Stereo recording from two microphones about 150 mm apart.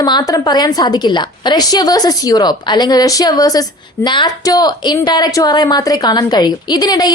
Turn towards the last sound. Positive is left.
turn(degrees=25)  # may be behind; listen again after turning